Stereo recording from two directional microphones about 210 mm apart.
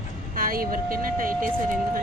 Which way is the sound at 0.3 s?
45° right (ahead or behind).